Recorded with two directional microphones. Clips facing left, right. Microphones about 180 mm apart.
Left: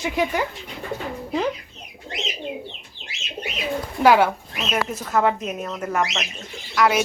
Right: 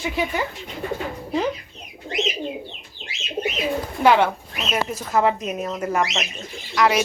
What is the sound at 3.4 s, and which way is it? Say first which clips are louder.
Bird: right 7 dB; 50° right (ahead or behind).